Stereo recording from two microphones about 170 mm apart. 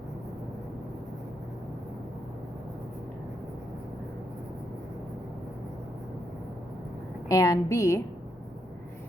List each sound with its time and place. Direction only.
7.3 s a woman's voice: 20° left (ahead or behind)